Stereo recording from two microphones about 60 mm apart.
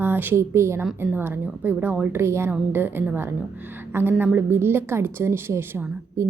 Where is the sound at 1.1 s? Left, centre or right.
Right.